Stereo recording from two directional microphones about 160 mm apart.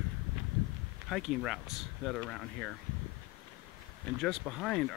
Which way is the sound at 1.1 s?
Centre (ahead or behind).